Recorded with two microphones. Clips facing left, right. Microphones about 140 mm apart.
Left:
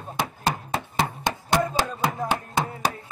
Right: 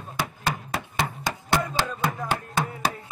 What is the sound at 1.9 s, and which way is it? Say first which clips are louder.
Chopping: left 2 dB; 15° left (ahead or behind).